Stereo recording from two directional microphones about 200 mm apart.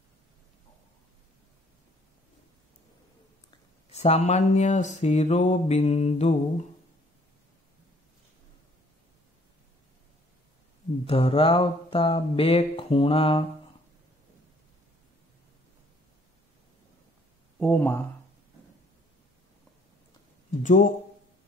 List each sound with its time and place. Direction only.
3.9 s mantra: 35° left (ahead or behind)
11.1 s mantra: 30° left (ahead or behind)
17.6 s speech: 5° left (ahead or behind)
20.6 s mantra: 40° left (ahead or behind)